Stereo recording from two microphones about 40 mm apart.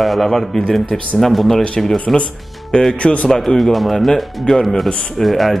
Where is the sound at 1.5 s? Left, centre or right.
Left.